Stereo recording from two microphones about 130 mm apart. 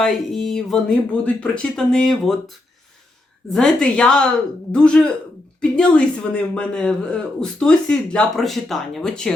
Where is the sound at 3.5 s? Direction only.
5° left (ahead or behind).